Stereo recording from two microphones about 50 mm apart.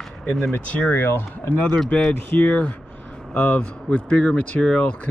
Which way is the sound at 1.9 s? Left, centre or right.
Left.